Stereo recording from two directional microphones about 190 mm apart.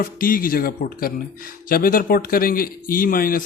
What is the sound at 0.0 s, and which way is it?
Speech, 50° left (ahead or behind).